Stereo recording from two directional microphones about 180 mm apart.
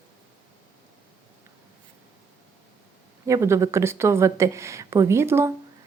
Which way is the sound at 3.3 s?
15° right (ahead or behind).